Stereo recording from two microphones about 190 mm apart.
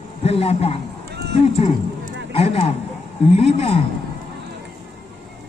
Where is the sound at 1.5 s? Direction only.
30° left (ahead or behind).